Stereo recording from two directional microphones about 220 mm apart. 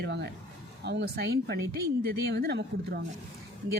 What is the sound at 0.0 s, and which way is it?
Speech, 50° right (ahead or behind).